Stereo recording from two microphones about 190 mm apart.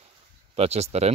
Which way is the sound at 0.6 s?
35° right (ahead or behind).